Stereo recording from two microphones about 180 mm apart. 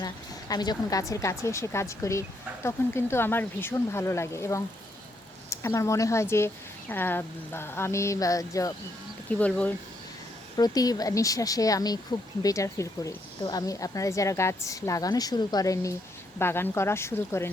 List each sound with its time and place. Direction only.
0.0 s speech: 20° left (ahead or behind)
9.4 s speech: 10° left (ahead or behind)
10.6 s speech: 20° left (ahead or behind)